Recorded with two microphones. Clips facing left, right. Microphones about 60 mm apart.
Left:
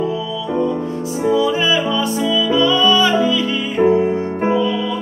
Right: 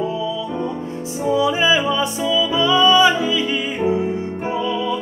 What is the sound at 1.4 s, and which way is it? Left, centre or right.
Music, centre.